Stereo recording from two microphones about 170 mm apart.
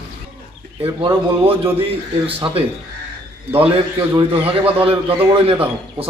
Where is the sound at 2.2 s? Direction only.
35° right (ahead or behind).